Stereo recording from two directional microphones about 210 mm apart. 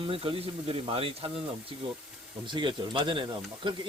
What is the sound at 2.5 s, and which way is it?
Speech, 20° right (ahead or behind).